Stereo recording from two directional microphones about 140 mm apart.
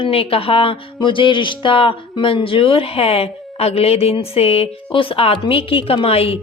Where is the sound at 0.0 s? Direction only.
45° left (ahead or behind).